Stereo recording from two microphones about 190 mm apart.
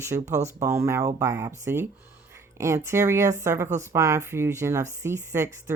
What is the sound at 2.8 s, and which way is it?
Speech, 15° right (ahead or behind).